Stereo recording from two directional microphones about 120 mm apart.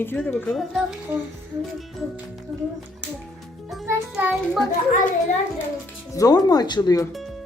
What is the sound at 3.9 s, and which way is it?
Child singing, 15° right (ahead or behind).